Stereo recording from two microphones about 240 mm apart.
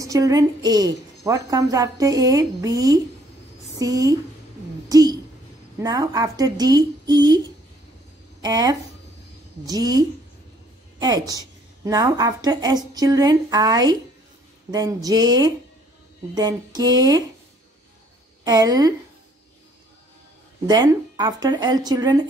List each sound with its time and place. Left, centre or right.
0.0 s a woman's voice: centre
4.8 s a sound: centre
5.8 s a woman's voice: centre
18.4 s a woman's voice: centre
20.6 s a woman's voice: centre